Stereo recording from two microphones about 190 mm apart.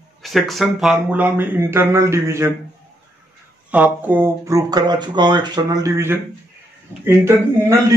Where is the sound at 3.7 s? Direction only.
10° right (ahead or behind).